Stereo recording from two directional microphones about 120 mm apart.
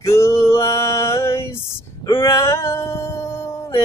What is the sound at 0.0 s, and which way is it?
Male singing, 25° left (ahead or behind).